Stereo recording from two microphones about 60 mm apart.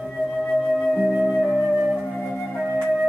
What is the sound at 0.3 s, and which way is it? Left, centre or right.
Music, centre.